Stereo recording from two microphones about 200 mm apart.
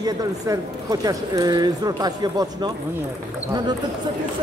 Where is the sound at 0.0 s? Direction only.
20° right (ahead or behind).